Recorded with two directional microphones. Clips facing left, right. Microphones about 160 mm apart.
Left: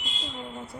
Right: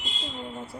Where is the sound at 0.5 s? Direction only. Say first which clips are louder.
Right 1 dB; centre (ahead or behind).